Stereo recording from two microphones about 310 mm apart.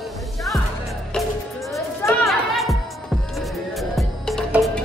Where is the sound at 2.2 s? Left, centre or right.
Centre.